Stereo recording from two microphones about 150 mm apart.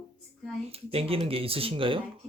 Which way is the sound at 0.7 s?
40° right (ahead or behind).